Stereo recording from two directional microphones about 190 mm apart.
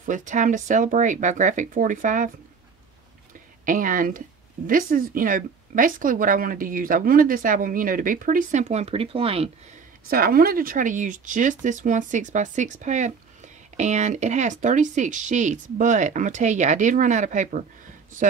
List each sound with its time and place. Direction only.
0.0 s speech: 40° right (ahead or behind)
3.6 s speech: 45° right (ahead or behind)
10.0 s speech: 50° right (ahead or behind)